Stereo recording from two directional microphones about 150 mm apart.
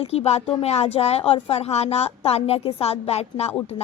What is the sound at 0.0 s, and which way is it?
A woman's voice, 40° left (ahead or behind).